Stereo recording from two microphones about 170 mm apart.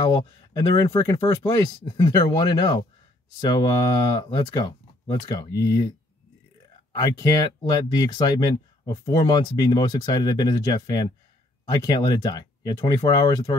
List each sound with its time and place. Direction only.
0.5 s speech: 25° left (ahead or behind)
6.9 s speech: 20° left (ahead or behind)